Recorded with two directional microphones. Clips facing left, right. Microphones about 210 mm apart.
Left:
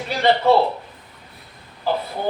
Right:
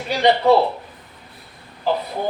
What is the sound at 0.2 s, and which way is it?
Speech, 15° right (ahead or behind).